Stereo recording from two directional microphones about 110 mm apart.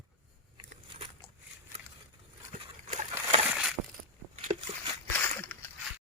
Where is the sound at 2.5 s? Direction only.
80° right.